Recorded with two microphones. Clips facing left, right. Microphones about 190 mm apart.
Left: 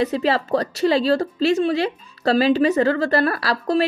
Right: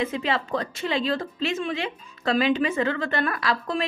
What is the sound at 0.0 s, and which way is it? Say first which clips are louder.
A woman's voice: left 6 dB; 40° left (ahead or behind).